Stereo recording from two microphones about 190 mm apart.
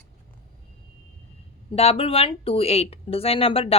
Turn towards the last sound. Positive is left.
turn(degrees=30)  # may be behind; listen again after turning